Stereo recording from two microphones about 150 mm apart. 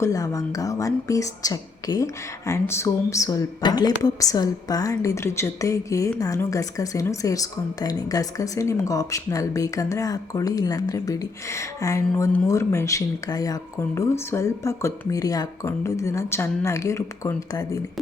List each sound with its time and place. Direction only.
0.0 s a woman's voice: 20° left (ahead or behind)